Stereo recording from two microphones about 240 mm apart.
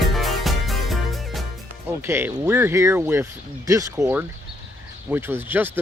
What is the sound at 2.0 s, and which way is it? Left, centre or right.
Speech, centre.